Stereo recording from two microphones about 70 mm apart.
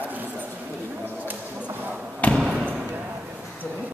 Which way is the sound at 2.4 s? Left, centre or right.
Right.